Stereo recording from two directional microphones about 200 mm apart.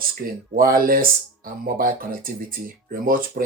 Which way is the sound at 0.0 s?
45° right (ahead or behind).